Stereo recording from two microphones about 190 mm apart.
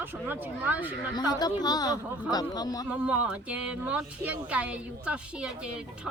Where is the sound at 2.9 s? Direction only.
5° right (ahead or behind).